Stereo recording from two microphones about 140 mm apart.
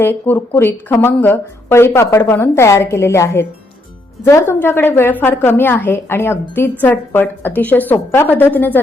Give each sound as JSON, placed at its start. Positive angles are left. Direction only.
{"t": 0.0, "sound": "a woman's voice", "side_deg": 15}